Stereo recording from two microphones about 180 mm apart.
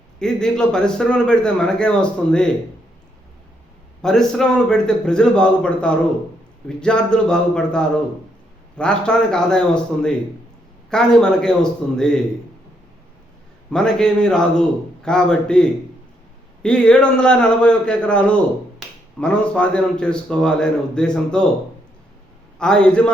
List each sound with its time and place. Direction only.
0.2 s speech: 5° left (ahead or behind)
4.0 s speech: 5° left (ahead or behind)
13.7 s speech: 5° left (ahead or behind)
22.5 s speech: 5° left (ahead or behind)